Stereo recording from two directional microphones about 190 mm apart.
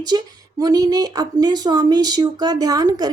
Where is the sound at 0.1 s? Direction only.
20° right (ahead or behind).